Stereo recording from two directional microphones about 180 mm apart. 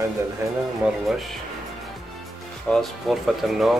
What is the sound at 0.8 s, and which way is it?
Speech, centre (ahead or behind).